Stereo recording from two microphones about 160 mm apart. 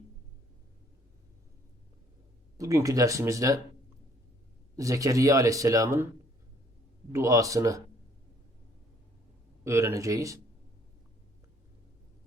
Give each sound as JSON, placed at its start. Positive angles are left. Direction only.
{"t": 2.6, "sound": "speech", "side_deg": -20}
{"t": 4.8, "sound": "speech", "side_deg": -20}
{"t": 7.1, "sound": "speech", "side_deg": -20}
{"t": 9.6, "sound": "speech", "side_deg": -20}